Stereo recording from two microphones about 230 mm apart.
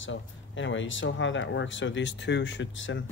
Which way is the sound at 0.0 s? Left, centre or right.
Left.